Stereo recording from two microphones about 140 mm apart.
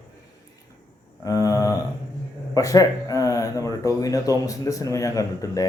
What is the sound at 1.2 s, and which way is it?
Speech, 25° left (ahead or behind).